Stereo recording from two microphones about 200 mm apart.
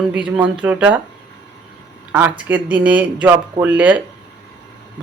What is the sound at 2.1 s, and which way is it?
Speech, 10° right (ahead or behind).